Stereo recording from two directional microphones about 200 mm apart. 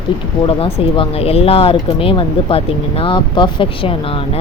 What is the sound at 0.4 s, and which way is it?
Speech, 30° left (ahead or behind).